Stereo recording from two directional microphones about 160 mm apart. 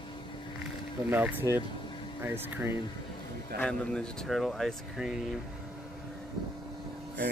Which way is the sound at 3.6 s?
5° left (ahead or behind).